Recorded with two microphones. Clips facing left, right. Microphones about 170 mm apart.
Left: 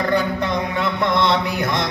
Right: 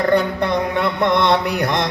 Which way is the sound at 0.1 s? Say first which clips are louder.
Right 3 dB; 60° right (ahead or behind).